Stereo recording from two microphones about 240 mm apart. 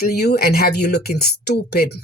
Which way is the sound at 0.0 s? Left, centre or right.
Left.